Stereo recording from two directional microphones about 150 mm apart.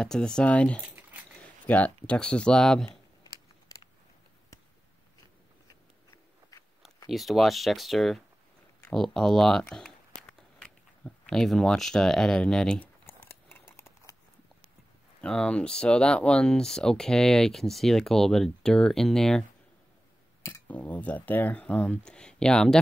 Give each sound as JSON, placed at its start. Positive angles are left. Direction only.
{"t": 0.0, "sound": "speech", "side_deg": 5}
{"t": 7.1, "sound": "speech", "side_deg": 0}
{"t": 13.0, "sound": "scissors", "side_deg": 15}
{"t": 13.7, "sound": "a sound", "side_deg": 15}
{"t": 15.2, "sound": "speech", "side_deg": 5}
{"t": 20.4, "sound": "speech", "side_deg": 15}